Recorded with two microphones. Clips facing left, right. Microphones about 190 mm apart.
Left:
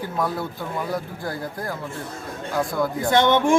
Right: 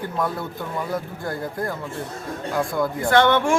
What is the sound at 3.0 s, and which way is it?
Speech, 20° left (ahead or behind).